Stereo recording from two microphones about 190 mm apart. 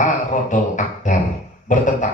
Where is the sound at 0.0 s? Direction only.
40° left (ahead or behind).